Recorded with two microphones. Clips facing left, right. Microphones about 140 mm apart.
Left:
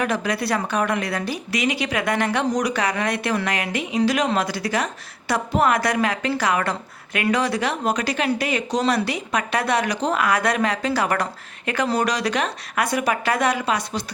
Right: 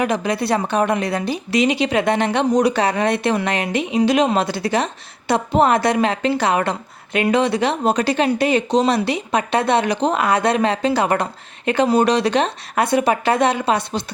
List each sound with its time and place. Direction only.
0.0 s a woman's voice: 20° right (ahead or behind)